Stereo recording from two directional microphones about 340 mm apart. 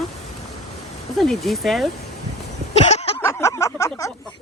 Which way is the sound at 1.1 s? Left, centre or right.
Centre.